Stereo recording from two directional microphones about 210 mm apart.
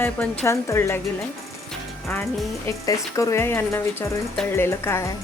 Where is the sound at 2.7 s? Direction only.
15° left (ahead or behind).